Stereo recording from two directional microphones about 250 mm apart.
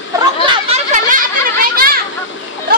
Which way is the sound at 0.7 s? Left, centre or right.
Right.